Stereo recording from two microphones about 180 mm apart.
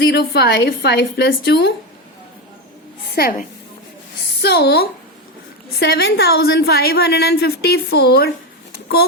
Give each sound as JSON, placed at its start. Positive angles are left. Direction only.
{"t": 0.0, "sound": "a woman's voice", "side_deg": 65}
{"t": 4.4, "sound": "a woman's voice", "side_deg": 65}